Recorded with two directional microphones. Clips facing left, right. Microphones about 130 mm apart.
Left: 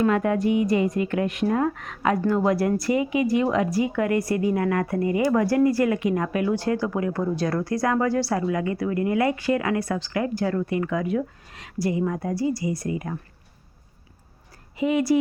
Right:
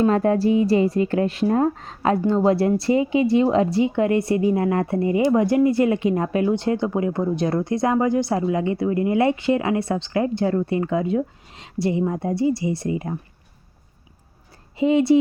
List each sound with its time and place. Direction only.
0.0 s a woman's voice: 35° right (ahead or behind)
14.8 s a woman's voice: 25° right (ahead or behind)